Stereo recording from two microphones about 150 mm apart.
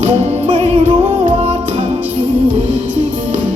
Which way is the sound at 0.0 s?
45° right (ahead or behind).